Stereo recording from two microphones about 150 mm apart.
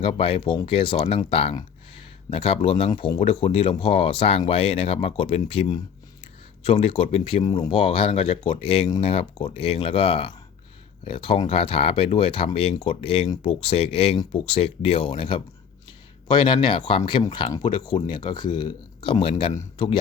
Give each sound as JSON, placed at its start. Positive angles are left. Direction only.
{"t": 0.0, "sound": "speech", "side_deg": 40}
{"t": 2.9, "sound": "speech", "side_deg": 30}